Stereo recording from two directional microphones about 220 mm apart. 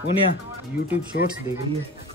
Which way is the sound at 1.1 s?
40° left (ahead or behind).